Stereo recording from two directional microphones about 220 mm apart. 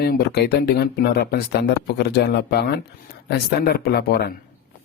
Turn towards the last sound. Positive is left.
turn(degrees=45)  # may be behind; listen again after turning